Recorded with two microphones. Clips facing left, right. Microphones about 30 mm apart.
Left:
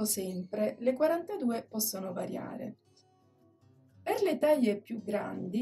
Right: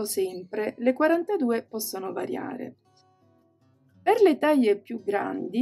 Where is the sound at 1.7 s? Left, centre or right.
Right.